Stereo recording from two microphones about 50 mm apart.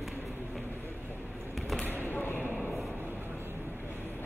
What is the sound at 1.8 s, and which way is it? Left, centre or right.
Basketball bounce, left.